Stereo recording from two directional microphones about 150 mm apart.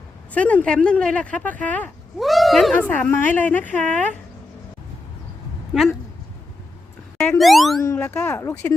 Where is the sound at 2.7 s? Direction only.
15° left (ahead or behind).